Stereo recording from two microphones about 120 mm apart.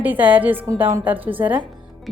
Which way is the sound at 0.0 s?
15° right (ahead or behind).